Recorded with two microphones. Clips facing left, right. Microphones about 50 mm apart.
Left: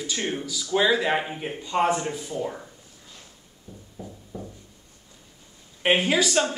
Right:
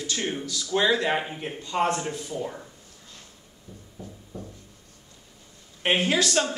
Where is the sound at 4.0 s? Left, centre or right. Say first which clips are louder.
Left 2 dB; left.